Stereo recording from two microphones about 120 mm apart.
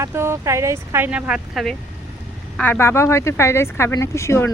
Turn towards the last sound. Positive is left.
turn(degrees=25)  # may be behind; listen again after turning